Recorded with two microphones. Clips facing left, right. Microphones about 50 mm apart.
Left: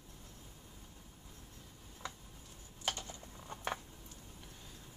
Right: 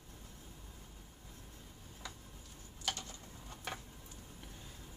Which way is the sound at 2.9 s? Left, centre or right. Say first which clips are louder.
Left 1 dB; left.